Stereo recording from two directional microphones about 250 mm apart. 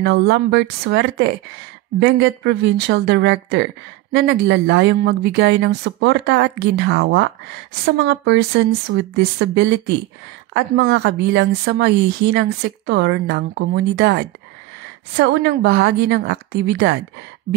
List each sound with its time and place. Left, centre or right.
0.0 s speech: right